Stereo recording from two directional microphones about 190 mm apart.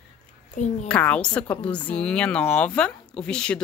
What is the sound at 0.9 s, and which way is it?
A woman's voice, 5° left (ahead or behind).